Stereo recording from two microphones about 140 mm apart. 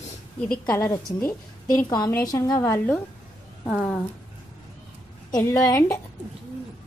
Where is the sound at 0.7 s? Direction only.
20° left (ahead or behind).